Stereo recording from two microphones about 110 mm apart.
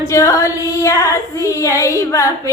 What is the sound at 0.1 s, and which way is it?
Female singing, 25° left (ahead or behind).